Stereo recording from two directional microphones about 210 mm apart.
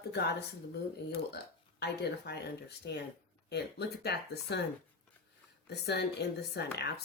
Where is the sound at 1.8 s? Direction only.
50° left (ahead or behind).